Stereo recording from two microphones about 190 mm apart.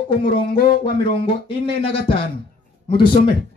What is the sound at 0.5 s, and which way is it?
Speech, 50° left (ahead or behind).